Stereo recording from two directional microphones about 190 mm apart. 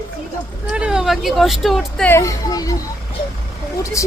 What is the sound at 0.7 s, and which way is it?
Speech, 5° right (ahead or behind).